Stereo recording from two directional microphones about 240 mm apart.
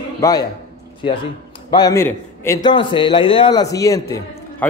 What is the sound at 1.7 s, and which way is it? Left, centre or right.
A man's voice, centre.